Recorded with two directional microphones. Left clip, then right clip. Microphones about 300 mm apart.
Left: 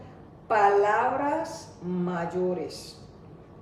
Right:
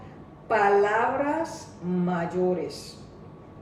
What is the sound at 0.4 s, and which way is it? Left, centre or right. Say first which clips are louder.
A woman's voice: even; centre.